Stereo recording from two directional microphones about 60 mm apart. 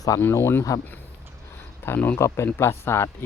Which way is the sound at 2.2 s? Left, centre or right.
Left.